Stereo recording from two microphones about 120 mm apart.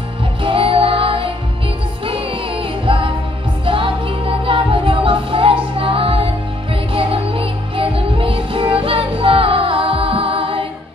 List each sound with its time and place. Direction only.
0.4 s music: 50° right (ahead or behind)